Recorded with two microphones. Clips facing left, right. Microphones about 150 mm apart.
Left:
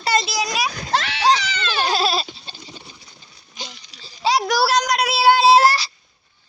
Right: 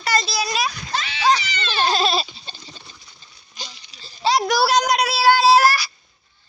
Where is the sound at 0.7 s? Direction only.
55° left (ahead or behind).